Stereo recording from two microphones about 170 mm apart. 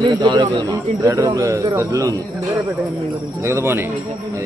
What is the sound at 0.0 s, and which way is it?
A man's voice, 25° right (ahead or behind).